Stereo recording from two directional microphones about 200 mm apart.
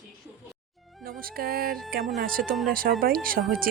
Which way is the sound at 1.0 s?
50° right (ahead or behind).